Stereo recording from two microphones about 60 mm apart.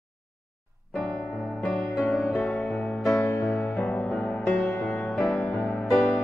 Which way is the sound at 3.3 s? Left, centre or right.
Left.